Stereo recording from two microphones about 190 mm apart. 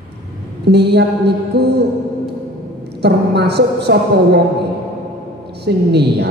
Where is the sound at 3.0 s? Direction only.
60° right (ahead or behind).